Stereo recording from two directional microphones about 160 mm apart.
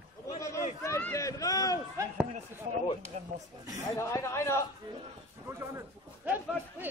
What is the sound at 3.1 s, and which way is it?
Roaring cats, 50° right (ahead or behind).